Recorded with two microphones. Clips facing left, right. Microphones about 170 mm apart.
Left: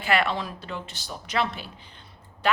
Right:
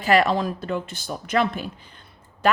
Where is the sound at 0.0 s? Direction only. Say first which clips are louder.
Right 6 dB; 40° right (ahead or behind).